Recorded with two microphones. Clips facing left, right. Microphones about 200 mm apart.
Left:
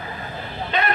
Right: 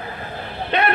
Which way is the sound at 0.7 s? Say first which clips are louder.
Right 4 dB; 65° right (ahead or behind).